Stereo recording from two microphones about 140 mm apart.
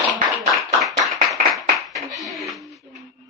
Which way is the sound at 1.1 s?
Centre (ahead or behind).